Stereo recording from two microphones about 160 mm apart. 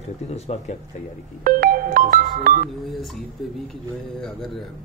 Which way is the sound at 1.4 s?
60° right (ahead or behind).